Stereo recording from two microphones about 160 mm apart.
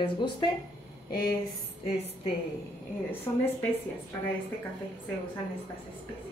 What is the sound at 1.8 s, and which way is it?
Speech, 40° left (ahead or behind).